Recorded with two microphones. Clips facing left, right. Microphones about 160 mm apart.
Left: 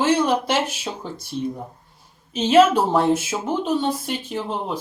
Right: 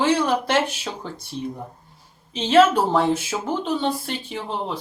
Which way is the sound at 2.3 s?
5° left (ahead or behind).